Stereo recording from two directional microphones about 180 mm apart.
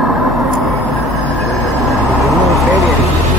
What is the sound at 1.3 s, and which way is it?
Vehicle, centre (ahead or behind).